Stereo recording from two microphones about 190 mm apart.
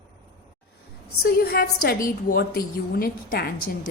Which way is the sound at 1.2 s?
55° left (ahead or behind).